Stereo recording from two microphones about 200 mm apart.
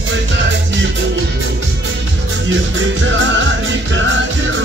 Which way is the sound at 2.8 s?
65° right (ahead or behind).